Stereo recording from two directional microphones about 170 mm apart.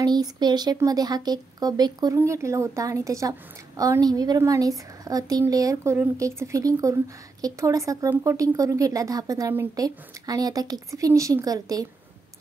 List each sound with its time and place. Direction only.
0.0 s a woman's voice: 25° right (ahead or behind)